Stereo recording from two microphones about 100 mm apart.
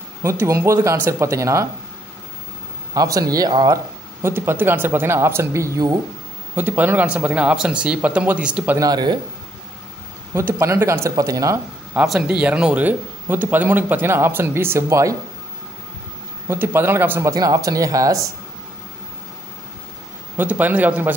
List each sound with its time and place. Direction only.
0.2 s speech: 30° right (ahead or behind)
2.9 s speech: 35° right (ahead or behind)
4.2 s speech: 25° right (ahead or behind)
6.5 s speech: 15° right (ahead or behind)
8.7 s speech: 40° right (ahead or behind)
10.3 s speech: 25° right (ahead or behind)
12.1 s speech: 10° right (ahead or behind); by 15.1 s 30° right (ahead or behind)
16.4 s speech: 20° right (ahead or behind)
17.2 s speech: 35° right (ahead or behind)
20.3 s speech: 15° right (ahead or behind)